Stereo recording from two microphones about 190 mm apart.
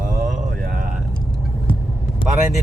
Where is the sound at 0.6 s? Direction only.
45° right (ahead or behind).